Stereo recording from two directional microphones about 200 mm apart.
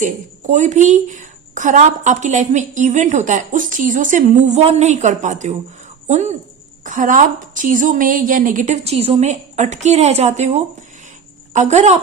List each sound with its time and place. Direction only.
0.0 s a woman's voice: 40° right (ahead or behind)